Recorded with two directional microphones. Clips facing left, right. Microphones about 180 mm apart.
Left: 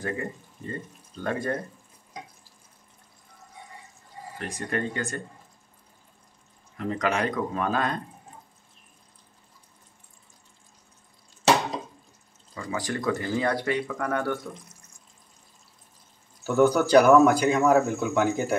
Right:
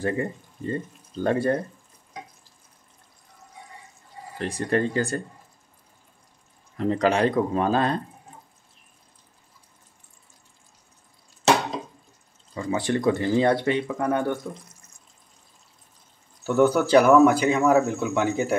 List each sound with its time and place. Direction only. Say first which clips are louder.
0.0 s speech: right 5 dB; 30° right (ahead or behind)
4.4 s speech: right 6 dB; 30° right (ahead or behind)
6.8 s speech: right 6 dB; 30° right (ahead or behind)
12.5 s speech: right 6 dB; 25° right (ahead or behind)
16.4 s speech: right 1 dB; centre (ahead or behind)